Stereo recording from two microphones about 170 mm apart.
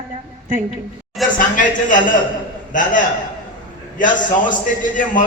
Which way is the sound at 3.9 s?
50° left (ahead or behind).